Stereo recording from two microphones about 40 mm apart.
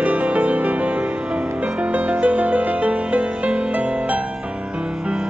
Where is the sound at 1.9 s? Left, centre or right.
Right.